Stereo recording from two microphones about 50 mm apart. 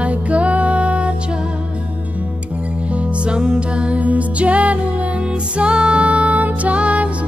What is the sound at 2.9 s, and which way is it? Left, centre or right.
Music, right.